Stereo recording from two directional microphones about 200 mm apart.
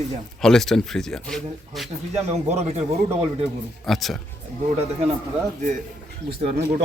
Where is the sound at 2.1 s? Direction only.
30° right (ahead or behind).